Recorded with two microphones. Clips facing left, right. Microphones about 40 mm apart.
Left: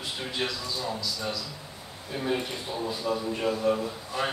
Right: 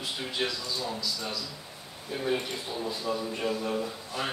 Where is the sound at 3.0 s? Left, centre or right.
Centre.